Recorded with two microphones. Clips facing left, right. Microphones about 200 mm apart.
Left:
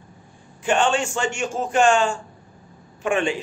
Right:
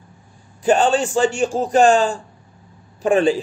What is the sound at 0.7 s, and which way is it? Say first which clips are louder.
A man's voice: right 5 dB; 35° right (ahead or behind).